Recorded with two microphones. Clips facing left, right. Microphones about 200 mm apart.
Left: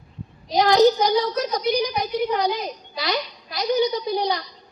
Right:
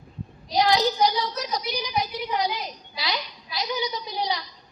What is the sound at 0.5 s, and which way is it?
A woman's voice, 50° left (ahead or behind).